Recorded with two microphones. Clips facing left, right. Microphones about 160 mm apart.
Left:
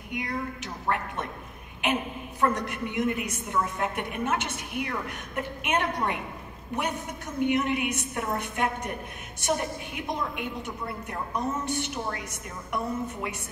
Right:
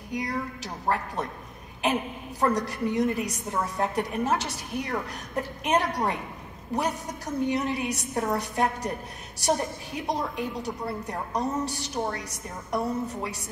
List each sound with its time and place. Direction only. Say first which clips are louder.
0.1 s a woman's voice: right 2 dB; 35° right (ahead or behind)